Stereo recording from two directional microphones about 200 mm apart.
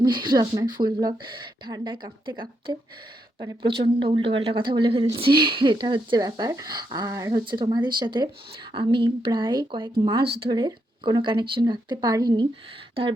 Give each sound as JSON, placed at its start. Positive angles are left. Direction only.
{"t": 0.0, "sound": "speech", "side_deg": -20}